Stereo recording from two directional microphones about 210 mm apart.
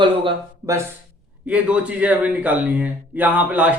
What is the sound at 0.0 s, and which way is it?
Speech, 20° right (ahead or behind).